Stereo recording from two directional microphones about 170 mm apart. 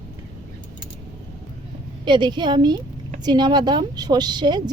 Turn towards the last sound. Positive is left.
turn(degrees=-25)  # may be behind; listen again after turning